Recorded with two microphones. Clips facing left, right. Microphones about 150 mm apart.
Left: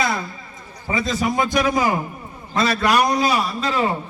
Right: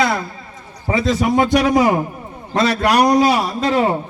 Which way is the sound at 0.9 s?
70° right (ahead or behind).